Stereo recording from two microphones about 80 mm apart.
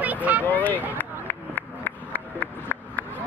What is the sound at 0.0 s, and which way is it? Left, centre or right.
Vehicle, centre.